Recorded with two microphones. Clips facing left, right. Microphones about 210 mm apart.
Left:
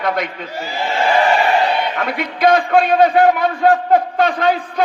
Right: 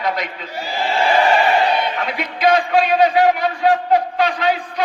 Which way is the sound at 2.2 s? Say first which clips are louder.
Left 2 dB; 55° left (ahead or behind).